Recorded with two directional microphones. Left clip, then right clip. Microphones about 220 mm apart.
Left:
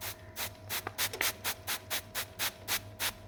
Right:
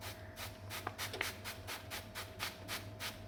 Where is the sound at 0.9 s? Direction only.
50° left (ahead or behind).